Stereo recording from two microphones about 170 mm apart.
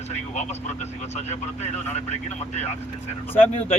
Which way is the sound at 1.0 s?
40° left (ahead or behind).